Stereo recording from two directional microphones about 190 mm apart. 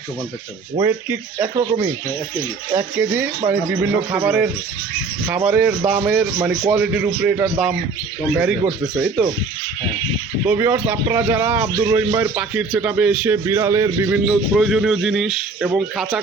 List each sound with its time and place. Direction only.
0.9 s a man's voice: 10° right (ahead or behind)
5.5 s a man's voice: 5° right (ahead or behind)
9.2 s speech: centre (ahead or behind)
10.4 s a man's voice: 10° right (ahead or behind)